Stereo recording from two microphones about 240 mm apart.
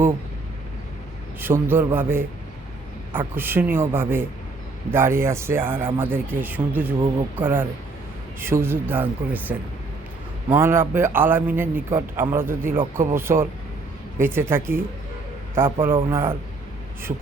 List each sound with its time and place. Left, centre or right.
1.4 s a man's voice: centre
12.8 s speech: right
14.2 s a man's voice: centre